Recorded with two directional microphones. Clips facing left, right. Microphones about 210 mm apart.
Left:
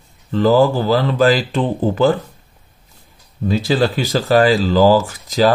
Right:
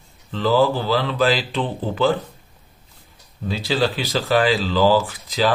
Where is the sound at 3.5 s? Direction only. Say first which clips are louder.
Left 5 dB; 45° left (ahead or behind).